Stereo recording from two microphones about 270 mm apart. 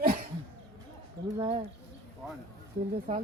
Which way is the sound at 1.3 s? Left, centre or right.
Right.